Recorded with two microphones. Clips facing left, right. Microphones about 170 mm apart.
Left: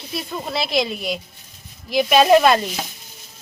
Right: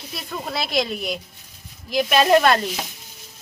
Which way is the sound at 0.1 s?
Centre (ahead or behind).